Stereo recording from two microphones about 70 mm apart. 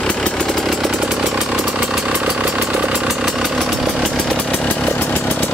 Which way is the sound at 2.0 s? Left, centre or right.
Centre.